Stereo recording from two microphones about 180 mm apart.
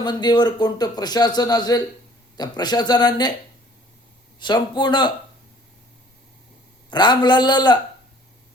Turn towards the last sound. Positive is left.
turn(degrees=25)  # may be behind; listen again after turning